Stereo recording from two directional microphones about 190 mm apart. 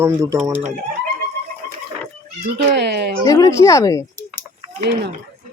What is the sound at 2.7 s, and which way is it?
Speech, 60° right (ahead or behind).